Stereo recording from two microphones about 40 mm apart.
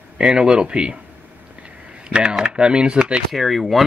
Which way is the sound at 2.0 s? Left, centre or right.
Right.